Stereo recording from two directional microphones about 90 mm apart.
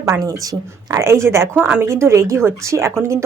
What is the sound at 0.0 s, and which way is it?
A woman's voice, 40° right (ahead or behind).